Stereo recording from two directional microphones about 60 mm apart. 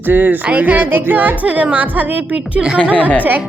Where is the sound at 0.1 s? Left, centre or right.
Right.